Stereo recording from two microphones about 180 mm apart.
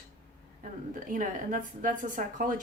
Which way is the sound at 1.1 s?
45° right (ahead or behind).